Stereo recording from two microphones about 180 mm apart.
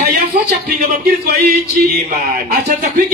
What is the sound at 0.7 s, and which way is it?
Speech, 60° right (ahead or behind).